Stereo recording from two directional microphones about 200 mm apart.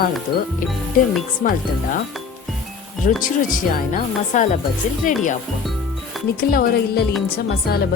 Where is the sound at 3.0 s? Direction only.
40° left (ahead or behind).